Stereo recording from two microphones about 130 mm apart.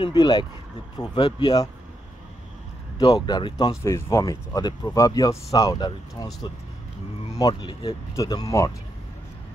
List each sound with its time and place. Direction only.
0.0 s speech: 35° left (ahead or behind)
3.2 s speech: 35° left (ahead or behind)
3.8 s speech: 25° left (ahead or behind)
7.3 s speech: 30° left (ahead or behind)